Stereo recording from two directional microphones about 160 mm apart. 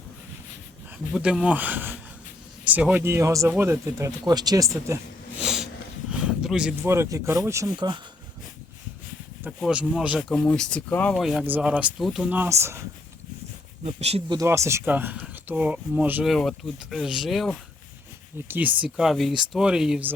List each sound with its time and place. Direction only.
1.1 s speech: 5° right (ahead or behind)
5.4 s snort: 5° right (ahead or behind)
6.1 s a sound: 5° right (ahead or behind)
6.8 s speech: 15° right (ahead or behind)
9.6 s speech: 5° right (ahead or behind)
13.8 s speech: 40° right (ahead or behind)
14.3 s speech: 20° right (ahead or behind)
16.3 s speech: centre (ahead or behind)
18.4 s speech: 10° right (ahead or behind)